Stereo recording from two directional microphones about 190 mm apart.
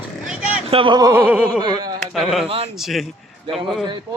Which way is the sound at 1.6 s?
20° right (ahead or behind).